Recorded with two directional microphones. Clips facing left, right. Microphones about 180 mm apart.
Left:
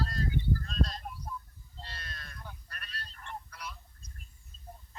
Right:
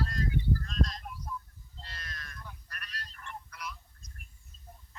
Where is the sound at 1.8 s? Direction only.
30° left (ahead or behind).